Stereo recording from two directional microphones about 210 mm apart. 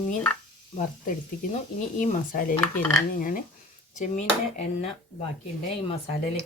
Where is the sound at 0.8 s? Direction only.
40° left (ahead or behind).